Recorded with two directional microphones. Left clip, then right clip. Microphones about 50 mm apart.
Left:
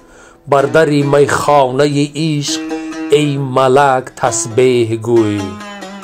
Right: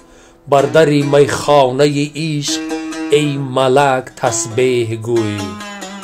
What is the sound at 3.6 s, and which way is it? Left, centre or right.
Speech, left.